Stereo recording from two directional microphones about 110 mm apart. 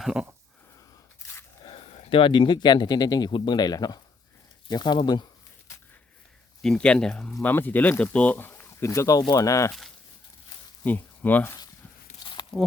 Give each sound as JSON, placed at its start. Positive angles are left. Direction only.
{"t": 0.0, "sound": "speech", "side_deg": -5}
{"t": 1.6, "sound": "speech", "side_deg": 60}
{"t": 6.6, "sound": "speech", "side_deg": 5}
{"t": 10.8, "sound": "speech", "side_deg": 15}
{"t": 12.2, "sound": "a sound", "side_deg": 45}